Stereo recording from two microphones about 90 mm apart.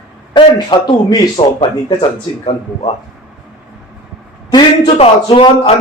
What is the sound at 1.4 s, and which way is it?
Speech, 75° left (ahead or behind).